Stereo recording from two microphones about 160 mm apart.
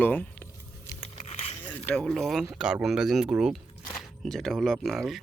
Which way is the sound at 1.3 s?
45° left (ahead or behind).